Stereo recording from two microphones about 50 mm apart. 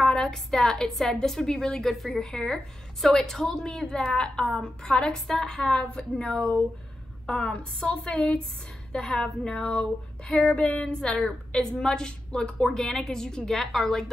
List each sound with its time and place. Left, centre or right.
0.0 s a woman's voice: centre